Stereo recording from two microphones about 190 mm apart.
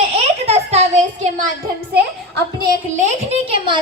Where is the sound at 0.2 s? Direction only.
35° right (ahead or behind).